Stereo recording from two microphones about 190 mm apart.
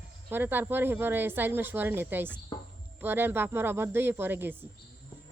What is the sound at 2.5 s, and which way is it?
Music, 20° left (ahead or behind).